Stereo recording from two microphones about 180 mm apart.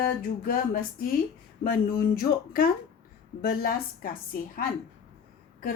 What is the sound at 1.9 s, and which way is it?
Speech, 55° left (ahead or behind).